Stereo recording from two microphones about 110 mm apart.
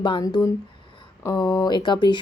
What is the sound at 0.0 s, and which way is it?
Speech, 45° left (ahead or behind).